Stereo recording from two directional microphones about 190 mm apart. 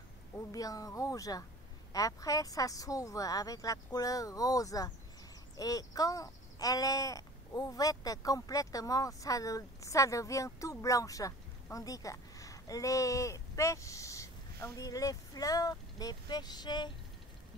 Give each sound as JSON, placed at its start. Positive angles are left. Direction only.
{"t": 0.5, "sound": "speech", "side_deg": 20}